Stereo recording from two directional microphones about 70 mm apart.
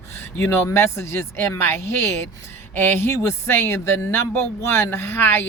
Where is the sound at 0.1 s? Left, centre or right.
Left.